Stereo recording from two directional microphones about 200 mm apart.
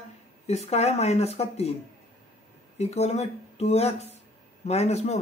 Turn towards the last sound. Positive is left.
turn(degrees=30)  # may be behind; listen again after turning